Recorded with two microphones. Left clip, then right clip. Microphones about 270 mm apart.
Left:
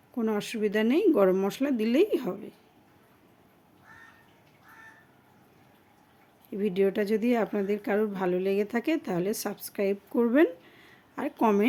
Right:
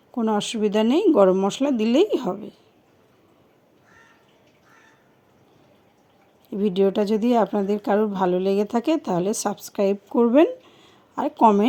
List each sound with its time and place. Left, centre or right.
0.1 s a woman's voice: centre
6.6 s a woman's voice: centre